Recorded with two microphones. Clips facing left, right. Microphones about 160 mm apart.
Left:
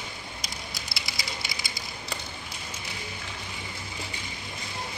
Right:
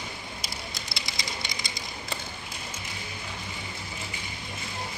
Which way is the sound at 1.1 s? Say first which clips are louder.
Even; 5° left (ahead or behind).